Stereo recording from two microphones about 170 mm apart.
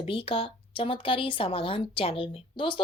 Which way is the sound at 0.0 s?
35° left (ahead or behind).